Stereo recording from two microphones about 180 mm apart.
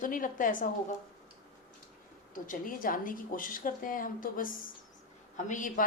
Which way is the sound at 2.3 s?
45° left (ahead or behind).